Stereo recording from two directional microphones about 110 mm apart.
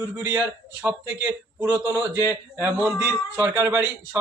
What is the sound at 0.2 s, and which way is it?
A man's voice, 15° right (ahead or behind).